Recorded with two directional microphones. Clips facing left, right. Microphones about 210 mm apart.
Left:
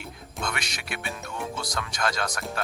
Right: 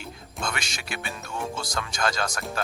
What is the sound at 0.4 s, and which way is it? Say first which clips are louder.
Speech: right 1 dB; 30° right (ahead or behind).